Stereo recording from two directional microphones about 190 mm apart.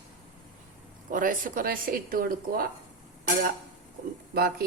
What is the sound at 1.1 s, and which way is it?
Speech, 45° right (ahead or behind).